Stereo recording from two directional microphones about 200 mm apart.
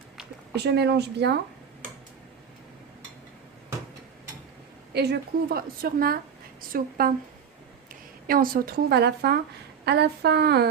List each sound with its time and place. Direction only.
0.5 s speech: 55° right (ahead or behind)
4.9 s a woman's voice: 55° right (ahead or behind)
8.3 s a woman's voice: 45° right (ahead or behind)